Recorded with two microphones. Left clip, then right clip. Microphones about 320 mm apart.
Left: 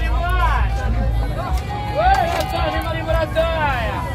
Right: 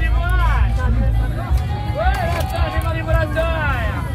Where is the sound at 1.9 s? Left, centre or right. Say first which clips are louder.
Left 5 dB; left.